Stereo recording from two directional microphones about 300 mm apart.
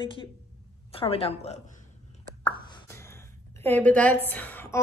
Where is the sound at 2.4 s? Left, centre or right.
Centre.